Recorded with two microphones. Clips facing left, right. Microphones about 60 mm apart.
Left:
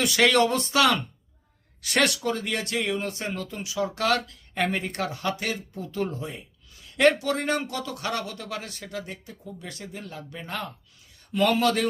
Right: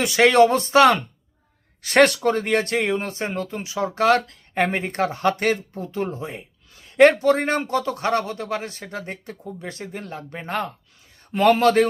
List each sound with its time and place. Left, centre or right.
0.0 s speech: right
5.8 s speech: right
9.2 s speech: right
9.6 s speech: right